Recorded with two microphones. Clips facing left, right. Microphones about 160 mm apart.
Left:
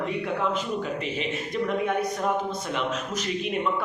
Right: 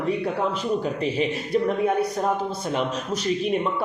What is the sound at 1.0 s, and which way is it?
Speech, 35° right (ahead or behind).